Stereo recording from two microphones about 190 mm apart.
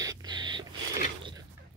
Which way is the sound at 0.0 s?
20° right (ahead or behind).